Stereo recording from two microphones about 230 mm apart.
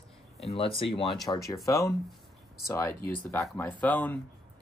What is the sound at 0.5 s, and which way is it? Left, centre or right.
Speech, left.